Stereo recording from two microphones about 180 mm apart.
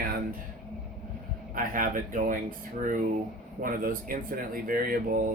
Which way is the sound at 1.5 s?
50° right (ahead or behind).